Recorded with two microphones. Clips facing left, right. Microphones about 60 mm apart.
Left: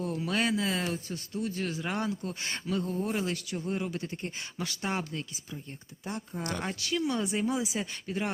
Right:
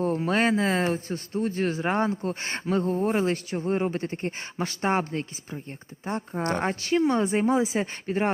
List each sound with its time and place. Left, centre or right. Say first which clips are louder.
0.0 s speech: right 7 dB; right